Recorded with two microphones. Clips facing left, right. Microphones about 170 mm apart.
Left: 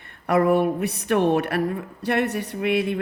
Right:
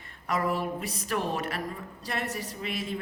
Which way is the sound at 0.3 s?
65° left (ahead or behind).